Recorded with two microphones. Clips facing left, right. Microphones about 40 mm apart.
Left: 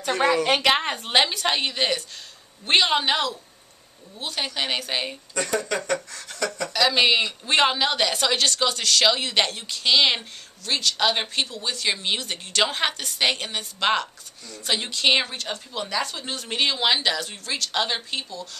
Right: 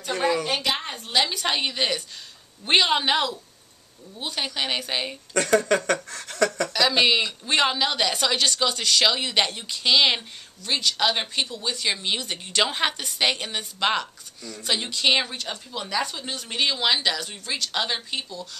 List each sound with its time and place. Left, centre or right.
0.5 s a woman's voice: left
1.3 s speech: centre
4.2 s speech: centre
5.3 s speech: right
6.7 s speech: centre